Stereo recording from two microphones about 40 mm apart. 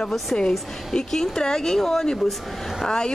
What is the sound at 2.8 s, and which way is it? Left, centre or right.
Speech, centre.